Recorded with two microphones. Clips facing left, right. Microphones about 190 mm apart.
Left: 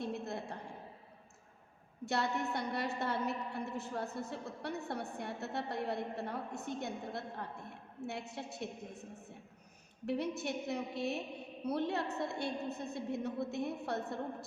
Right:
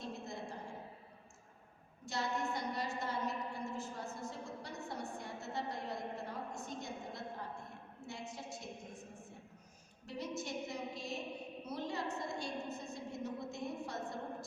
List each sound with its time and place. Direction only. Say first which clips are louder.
0.0 s a sound: left 5 dB; 60° left (ahead or behind)
2.0 s a woman's voice: left 3 dB; 60° left (ahead or behind)
10.1 s a woman's voice: left 6 dB; 60° left (ahead or behind)